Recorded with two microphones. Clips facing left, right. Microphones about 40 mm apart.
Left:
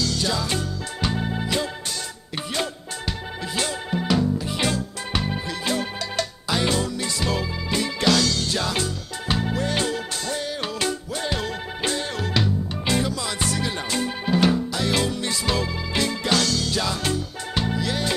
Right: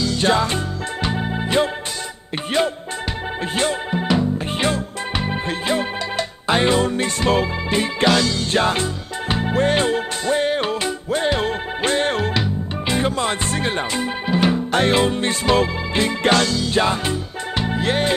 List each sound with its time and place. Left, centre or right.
0.2 s music: right
1.0 s music: centre
3.5 s music: right
4.5 s music: right
5.1 s music: right
6.4 s music: right
8.5 s music: right
12.4 s music: right
13.0 s music: right
13.9 s music: centre
14.7 s music: right
17.0 s music: right
17.7 s music: right